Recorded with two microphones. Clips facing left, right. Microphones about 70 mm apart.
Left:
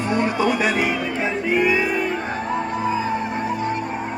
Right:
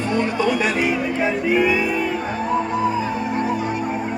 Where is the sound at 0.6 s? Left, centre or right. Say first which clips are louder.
Right 1 dB; centre.